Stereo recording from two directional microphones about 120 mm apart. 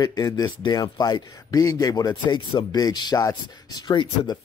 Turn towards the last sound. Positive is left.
turn(degrees=35)  # may be behind; listen again after turning